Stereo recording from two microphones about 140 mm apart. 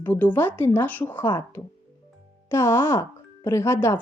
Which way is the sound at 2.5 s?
15° left (ahead or behind).